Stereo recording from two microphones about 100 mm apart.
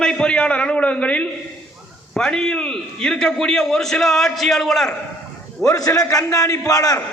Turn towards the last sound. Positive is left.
turn(degrees=35)  # may be behind; listen again after turning